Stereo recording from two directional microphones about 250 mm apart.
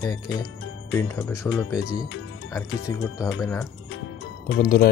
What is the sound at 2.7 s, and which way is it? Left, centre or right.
Speech, left.